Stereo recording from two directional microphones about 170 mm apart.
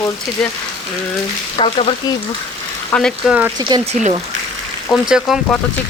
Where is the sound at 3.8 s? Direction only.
40° right (ahead or behind).